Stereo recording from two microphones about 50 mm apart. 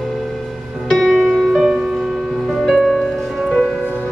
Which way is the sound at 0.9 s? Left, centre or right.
Centre.